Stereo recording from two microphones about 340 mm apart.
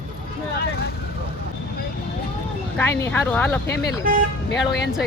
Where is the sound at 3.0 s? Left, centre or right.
Centre.